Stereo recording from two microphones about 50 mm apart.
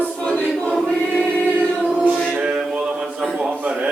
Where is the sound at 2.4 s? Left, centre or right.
Right.